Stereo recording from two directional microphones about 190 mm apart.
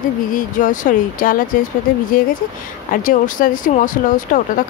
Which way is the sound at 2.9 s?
45° left (ahead or behind).